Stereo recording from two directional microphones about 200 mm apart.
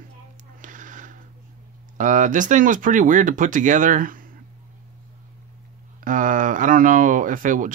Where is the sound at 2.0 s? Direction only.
40° right (ahead or behind).